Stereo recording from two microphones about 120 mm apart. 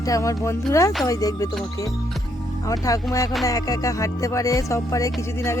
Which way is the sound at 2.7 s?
30° left (ahead or behind).